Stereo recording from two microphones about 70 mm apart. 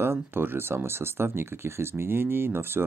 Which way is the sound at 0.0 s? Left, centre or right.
Right.